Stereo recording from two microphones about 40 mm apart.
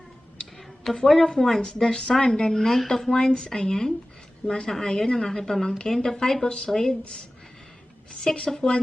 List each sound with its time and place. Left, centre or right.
0.9 s speech: centre
3.2 s speech: left
8.1 s speech: left